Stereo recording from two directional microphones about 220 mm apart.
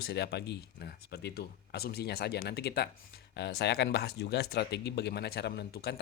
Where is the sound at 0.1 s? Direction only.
50° left (ahead or behind).